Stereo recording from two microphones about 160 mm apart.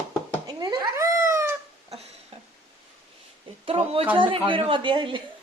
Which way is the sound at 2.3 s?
35° right (ahead or behind).